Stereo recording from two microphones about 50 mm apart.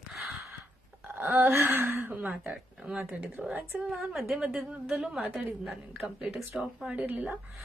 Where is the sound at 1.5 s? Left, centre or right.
Right.